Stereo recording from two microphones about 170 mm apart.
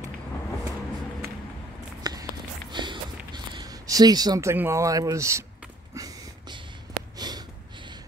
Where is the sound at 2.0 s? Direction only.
25° right (ahead or behind).